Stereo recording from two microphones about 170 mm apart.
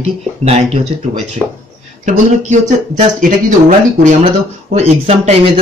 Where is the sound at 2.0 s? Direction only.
45° right (ahead or behind).